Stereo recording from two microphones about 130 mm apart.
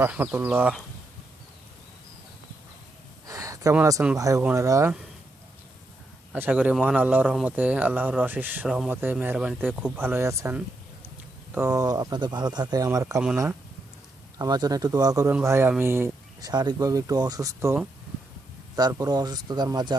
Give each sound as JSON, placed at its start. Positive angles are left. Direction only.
{"t": 0.0, "sound": "speech", "side_deg": -15}
{"t": 3.2, "sound": "a sound", "side_deg": -25}
{"t": 4.2, "sound": "speech", "side_deg": -25}
{"t": 6.3, "sound": "speech", "side_deg": -10}
{"t": 11.5, "sound": "speech", "side_deg": -20}
{"t": 13.1, "sound": "speech", "side_deg": -5}
{"t": 14.3, "sound": "speech", "side_deg": -30}
{"t": 16.4, "sound": "speech", "side_deg": -30}
{"t": 18.8, "sound": "speech", "side_deg": -30}